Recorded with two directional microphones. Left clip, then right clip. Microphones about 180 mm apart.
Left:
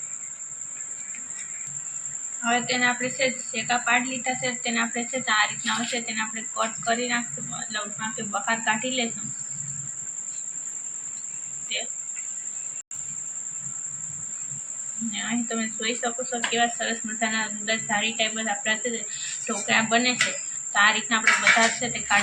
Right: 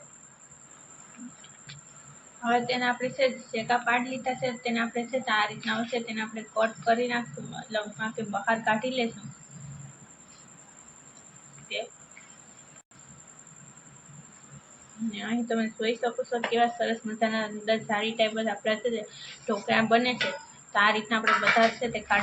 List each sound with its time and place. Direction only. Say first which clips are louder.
2.4 s a woman's voice: left 3 dB; 45° right (ahead or behind)
15.1 s a woman's voice: left 1 dB; 40° right (ahead or behind)